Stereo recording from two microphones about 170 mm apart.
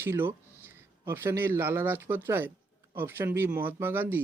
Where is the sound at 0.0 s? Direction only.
15° right (ahead or behind).